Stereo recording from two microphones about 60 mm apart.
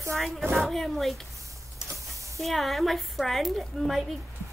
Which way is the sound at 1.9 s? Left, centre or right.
Right.